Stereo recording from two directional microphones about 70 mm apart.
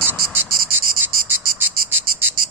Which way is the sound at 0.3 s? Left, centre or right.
Right.